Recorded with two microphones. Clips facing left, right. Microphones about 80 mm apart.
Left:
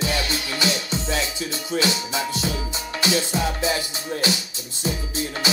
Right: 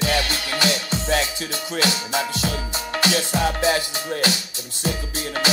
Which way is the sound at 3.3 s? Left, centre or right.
Right.